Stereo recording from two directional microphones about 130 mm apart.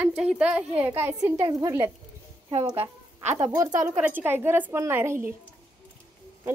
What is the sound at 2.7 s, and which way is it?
Speech, 50° right (ahead or behind).